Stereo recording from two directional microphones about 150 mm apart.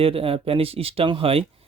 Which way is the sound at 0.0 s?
40° right (ahead or behind).